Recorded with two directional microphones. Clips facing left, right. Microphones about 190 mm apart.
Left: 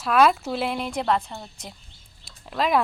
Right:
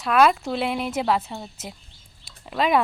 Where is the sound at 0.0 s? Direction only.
Centre (ahead or behind).